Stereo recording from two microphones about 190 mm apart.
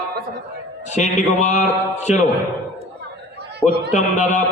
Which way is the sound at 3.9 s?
40° left (ahead or behind).